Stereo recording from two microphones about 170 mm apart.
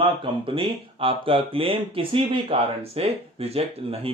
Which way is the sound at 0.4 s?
30° right (ahead or behind).